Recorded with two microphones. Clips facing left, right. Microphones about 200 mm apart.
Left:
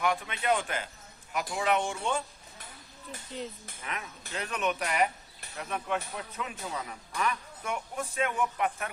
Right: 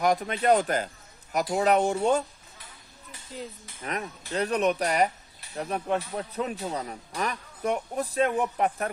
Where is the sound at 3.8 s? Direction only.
40° right (ahead or behind).